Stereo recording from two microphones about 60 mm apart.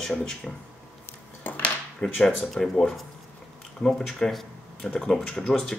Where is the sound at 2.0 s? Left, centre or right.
Left.